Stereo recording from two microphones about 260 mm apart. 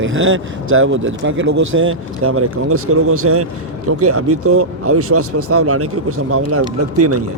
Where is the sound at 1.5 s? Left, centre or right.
Right.